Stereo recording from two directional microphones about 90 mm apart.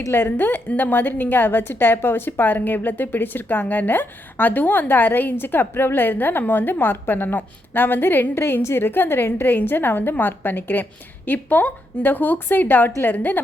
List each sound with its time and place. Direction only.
0.1 s a woman's voice: 25° left (ahead or behind)